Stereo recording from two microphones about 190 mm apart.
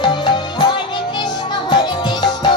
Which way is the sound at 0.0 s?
25° left (ahead or behind).